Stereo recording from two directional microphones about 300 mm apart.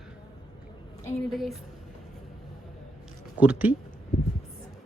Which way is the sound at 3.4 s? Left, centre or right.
Centre.